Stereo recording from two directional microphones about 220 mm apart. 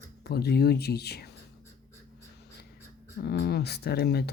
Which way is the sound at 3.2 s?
45° left (ahead or behind).